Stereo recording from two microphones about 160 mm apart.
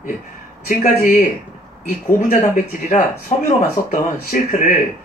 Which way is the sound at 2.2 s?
50° left (ahead or behind).